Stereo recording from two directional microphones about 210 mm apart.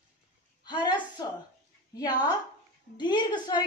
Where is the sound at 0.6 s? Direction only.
20° left (ahead or behind).